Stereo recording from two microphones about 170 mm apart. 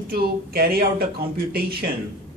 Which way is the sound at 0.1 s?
60° right (ahead or behind).